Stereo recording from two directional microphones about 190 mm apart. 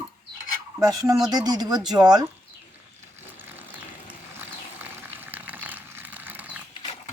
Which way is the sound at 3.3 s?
10° right (ahead or behind).